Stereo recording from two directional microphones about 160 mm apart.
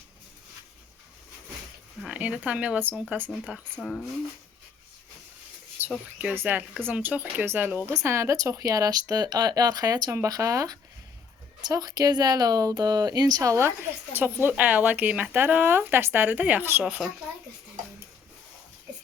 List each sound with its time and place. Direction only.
2.0 s speech: 5° right (ahead or behind)
3.8 s speech: 5° left (ahead or behind)
5.8 s a sound: 10° right (ahead or behind)
6.1 s speech: 10° right (ahead or behind)